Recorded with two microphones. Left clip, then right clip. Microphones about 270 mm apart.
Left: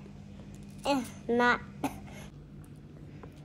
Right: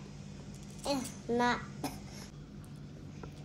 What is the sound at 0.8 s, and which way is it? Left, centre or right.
A child's voice, left.